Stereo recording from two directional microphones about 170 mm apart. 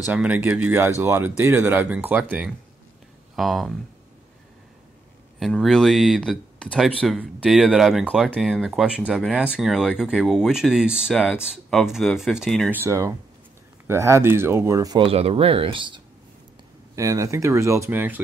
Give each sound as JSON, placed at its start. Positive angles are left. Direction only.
{"t": 0.1, "sound": "speech", "side_deg": -10}
{"t": 5.4, "sound": "speech", "side_deg": 0}
{"t": 12.7, "sound": "speech", "side_deg": -15}
{"t": 15.0, "sound": "speech", "side_deg": -35}
{"t": 16.9, "sound": "speech", "side_deg": -20}